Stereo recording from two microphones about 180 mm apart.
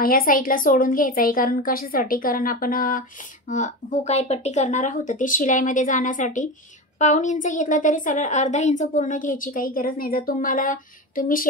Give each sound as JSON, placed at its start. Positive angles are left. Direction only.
{"t": 0.0, "sound": "a woman's voice", "side_deg": 55}